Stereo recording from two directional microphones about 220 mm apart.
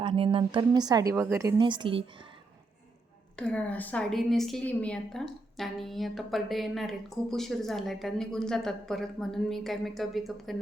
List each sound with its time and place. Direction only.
0.0 s speech: 25° right (ahead or behind)
3.3 s a woman's voice: 5° left (ahead or behind)